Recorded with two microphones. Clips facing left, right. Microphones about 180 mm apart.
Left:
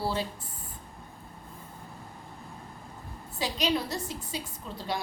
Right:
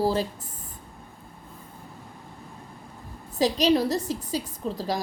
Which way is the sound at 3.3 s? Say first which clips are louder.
Right 8 dB; 40° right (ahead or behind).